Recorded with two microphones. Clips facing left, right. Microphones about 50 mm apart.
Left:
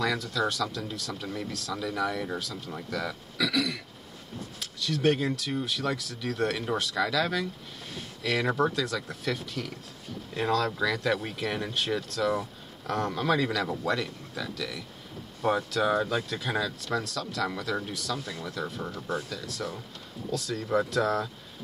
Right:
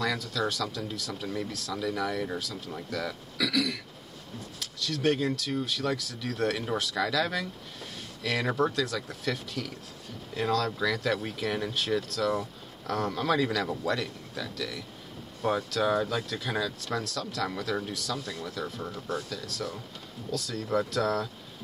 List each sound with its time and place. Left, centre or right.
0.0 s speech: centre
19.4 s speech: centre